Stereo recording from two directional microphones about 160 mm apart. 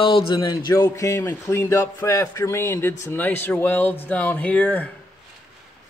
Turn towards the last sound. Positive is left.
turn(degrees=10)  # may be behind; listen again after turning